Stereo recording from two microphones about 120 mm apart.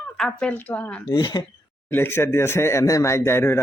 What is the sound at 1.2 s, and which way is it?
Speech, 40° left (ahead or behind).